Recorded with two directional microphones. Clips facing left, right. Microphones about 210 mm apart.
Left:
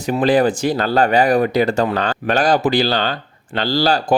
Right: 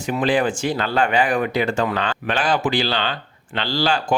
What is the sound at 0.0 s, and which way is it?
Speech, 40° left (ahead or behind).